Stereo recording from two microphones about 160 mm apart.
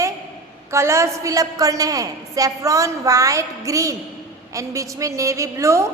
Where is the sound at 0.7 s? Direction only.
15° right (ahead or behind).